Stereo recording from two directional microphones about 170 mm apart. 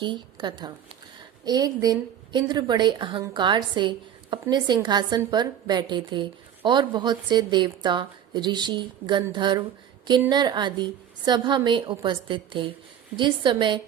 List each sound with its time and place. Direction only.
0.0 s a woman's voice: 25° right (ahead or behind)